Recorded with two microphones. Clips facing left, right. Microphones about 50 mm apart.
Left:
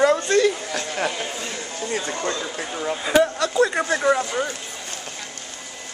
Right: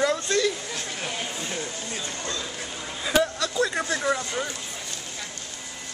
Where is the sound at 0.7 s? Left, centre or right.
Left.